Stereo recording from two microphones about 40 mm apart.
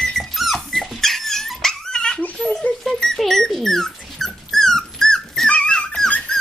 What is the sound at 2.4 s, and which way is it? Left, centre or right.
Rodents, centre.